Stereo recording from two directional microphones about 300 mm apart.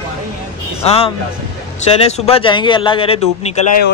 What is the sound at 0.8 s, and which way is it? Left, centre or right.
Speech, centre.